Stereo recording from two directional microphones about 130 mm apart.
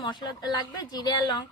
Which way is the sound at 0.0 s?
35° left (ahead or behind).